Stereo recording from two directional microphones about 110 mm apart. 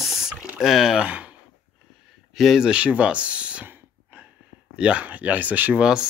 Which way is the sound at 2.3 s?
5° right (ahead or behind).